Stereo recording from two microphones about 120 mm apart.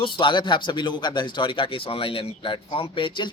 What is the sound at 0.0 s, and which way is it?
Speech, 40° left (ahead or behind).